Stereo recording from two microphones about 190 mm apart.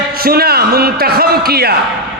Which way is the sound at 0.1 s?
50° right (ahead or behind).